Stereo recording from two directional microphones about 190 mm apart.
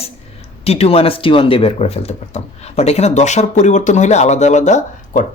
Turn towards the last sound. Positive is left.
turn(degrees=40)  # may be behind; listen again after turning